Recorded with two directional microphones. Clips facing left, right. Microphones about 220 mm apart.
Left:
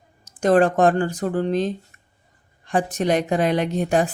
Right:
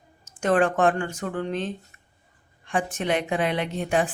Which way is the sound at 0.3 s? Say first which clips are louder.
Left 5 dB; 35° left (ahead or behind).